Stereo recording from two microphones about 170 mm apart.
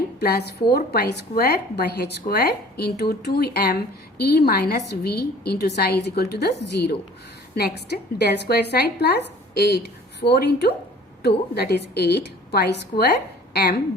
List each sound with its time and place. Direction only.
0.2 s a woman's voice: 70° left (ahead or behind)